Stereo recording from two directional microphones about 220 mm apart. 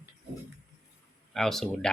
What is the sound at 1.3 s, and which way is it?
Speech, centre (ahead or behind).